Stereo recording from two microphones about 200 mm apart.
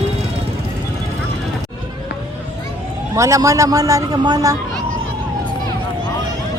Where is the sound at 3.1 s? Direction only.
15° right (ahead or behind).